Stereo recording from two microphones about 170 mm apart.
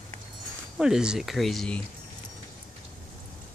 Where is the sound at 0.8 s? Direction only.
5° right (ahead or behind).